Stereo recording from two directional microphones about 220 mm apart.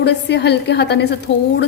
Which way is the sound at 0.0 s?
50° left (ahead or behind).